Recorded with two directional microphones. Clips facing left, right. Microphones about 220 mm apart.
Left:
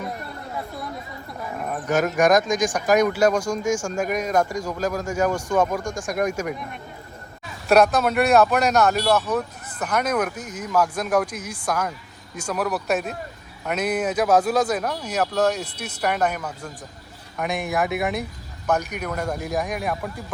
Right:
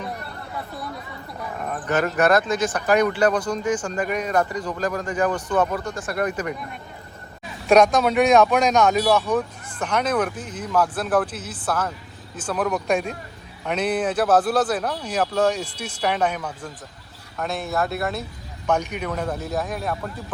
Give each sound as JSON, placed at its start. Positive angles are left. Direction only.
{"t": 1.5, "sound": "speech", "side_deg": 10}
{"t": 7.7, "sound": "speech", "side_deg": 5}